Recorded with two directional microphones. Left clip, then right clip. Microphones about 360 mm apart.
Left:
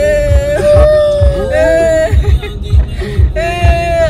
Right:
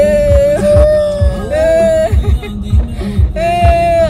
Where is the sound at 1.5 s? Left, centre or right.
Centre.